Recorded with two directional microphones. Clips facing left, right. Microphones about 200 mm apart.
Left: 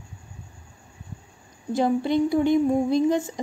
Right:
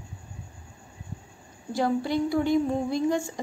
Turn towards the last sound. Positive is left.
turn(degrees=20)  # may be behind; listen again after turning